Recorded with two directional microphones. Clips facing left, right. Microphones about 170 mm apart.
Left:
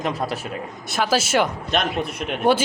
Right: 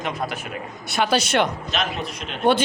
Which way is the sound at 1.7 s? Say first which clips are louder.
Left 7 dB; 55° left (ahead or behind).